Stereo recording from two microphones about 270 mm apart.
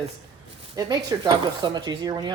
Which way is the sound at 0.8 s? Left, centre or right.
Centre.